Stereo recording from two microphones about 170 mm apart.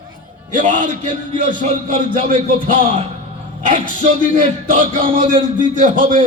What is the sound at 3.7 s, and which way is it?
A man's voice, 50° right (ahead or behind).